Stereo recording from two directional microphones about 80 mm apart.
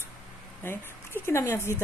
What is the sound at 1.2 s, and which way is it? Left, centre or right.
Speech, left.